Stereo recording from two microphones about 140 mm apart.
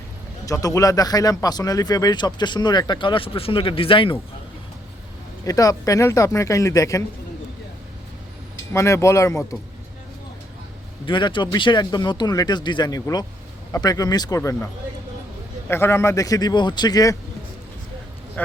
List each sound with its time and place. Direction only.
0.4 s speech: 25° left (ahead or behind)
5.5 s speech: 25° left (ahead or behind)
8.7 s speech: 20° left (ahead or behind)
11.0 s speech: 35° left (ahead or behind)
15.7 s speech: 15° left (ahead or behind)
18.4 s speech: 10° left (ahead or behind)